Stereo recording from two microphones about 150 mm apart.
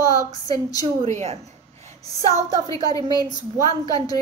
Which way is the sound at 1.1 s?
50° right (ahead or behind).